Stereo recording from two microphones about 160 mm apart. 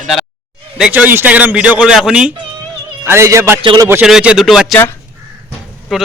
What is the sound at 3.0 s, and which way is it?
Speech, 15° right (ahead or behind).